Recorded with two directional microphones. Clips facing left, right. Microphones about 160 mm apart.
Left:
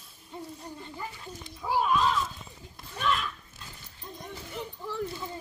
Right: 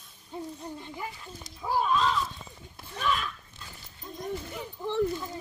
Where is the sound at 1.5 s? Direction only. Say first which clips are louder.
Even; 5° left (ahead or behind).